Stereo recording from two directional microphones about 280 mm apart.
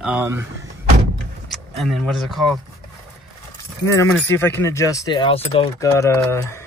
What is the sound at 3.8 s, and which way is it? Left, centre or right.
Speech, centre.